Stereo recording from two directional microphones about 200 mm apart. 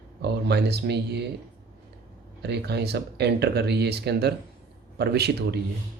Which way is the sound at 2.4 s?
55° right (ahead or behind).